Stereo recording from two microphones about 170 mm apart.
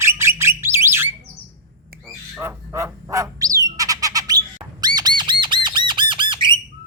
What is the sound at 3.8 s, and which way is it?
Squawk, 20° right (ahead or behind).